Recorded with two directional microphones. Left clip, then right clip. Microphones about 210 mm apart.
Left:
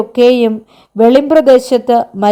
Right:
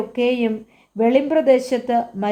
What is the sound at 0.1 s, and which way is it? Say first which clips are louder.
Speech: left 12 dB; 40° left (ahead or behind).